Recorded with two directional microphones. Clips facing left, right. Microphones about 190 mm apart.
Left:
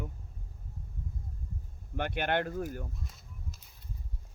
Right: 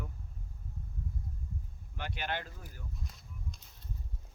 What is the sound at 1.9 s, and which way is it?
Speech, 55° left (ahead or behind).